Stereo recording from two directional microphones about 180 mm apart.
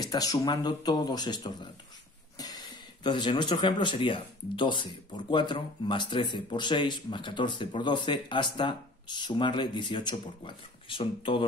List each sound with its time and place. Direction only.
0.1 s speech: 20° left (ahead or behind)